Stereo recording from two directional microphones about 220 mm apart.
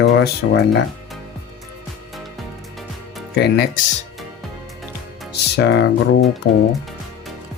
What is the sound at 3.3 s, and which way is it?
Speech, 45° left (ahead or behind).